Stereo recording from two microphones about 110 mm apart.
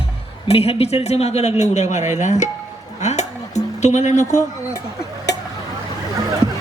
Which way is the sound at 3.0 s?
90° left.